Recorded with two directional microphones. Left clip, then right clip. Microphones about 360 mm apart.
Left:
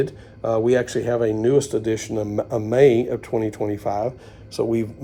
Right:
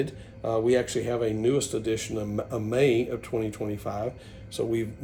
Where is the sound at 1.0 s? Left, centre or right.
Left.